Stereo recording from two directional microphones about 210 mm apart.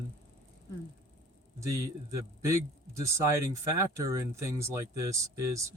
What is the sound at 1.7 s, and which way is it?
Speech, 15° right (ahead or behind).